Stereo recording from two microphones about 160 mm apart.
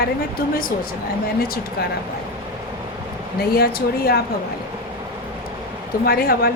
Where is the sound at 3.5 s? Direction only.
75° left (ahead or behind).